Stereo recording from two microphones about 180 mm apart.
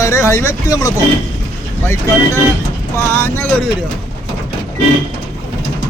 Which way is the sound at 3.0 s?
15° left (ahead or behind).